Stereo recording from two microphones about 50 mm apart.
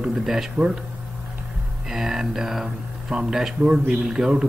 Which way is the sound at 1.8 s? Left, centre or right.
Centre.